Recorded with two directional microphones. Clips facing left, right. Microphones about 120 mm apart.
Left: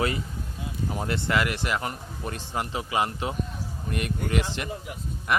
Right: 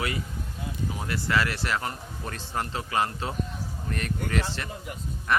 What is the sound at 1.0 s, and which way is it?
Speech, 25° left (ahead or behind).